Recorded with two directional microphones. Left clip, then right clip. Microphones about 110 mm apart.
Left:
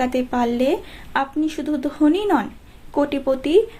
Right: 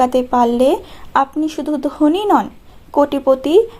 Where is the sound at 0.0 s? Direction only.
40° right (ahead or behind).